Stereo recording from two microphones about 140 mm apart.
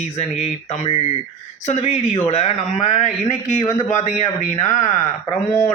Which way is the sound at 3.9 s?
60° left (ahead or behind).